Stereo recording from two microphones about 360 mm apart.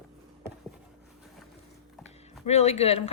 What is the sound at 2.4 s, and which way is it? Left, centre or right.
Speech, centre.